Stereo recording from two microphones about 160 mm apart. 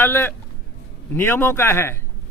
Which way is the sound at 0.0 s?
15° left (ahead or behind).